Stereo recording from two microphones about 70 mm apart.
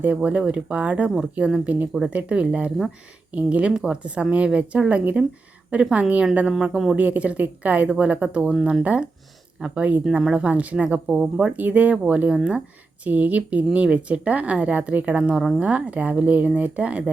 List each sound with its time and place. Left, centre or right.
0.2 s speech: centre
6.5 s speech: centre
6.9 s speech: right
15.2 s speech: centre
15.5 s speech: centre